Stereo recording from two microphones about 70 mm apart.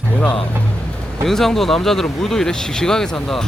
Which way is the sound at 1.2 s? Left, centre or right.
Centre.